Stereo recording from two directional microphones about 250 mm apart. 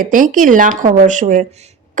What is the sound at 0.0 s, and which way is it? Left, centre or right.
A woman's voice, right.